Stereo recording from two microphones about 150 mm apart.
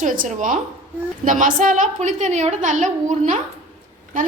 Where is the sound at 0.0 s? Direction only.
60° right (ahead or behind).